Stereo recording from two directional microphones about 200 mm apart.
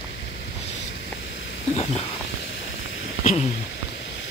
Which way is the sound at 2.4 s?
70° left (ahead or behind).